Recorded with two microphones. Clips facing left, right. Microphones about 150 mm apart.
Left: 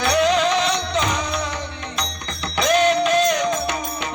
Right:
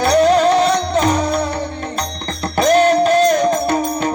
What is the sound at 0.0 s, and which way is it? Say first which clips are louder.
Music: right 6 dB; 45° right (ahead or behind).